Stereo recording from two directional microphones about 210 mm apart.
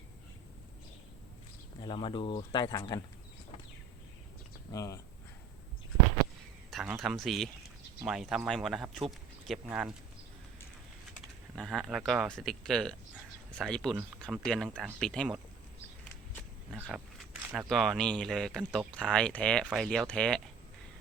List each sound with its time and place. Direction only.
1.8 s speech: 25° left (ahead or behind)
4.7 s speech: 15° left (ahead or behind)
6.7 s a sound: centre (ahead or behind)
7.0 s speech: centre (ahead or behind)
11.5 s speech: centre (ahead or behind)
16.7 s speech: 5° right (ahead or behind)